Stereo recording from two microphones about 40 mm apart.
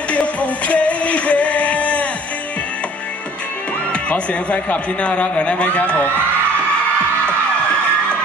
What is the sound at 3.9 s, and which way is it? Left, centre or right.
Speech, left.